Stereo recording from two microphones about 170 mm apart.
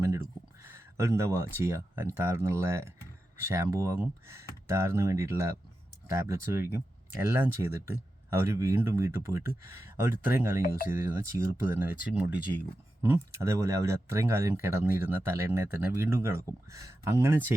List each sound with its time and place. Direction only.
0.0 s speech: 15° right (ahead or behind)